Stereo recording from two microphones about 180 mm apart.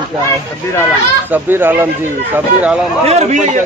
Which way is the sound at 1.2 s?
10° right (ahead or behind).